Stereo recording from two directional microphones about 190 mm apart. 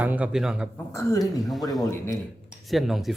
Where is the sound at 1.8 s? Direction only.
15° left (ahead or behind).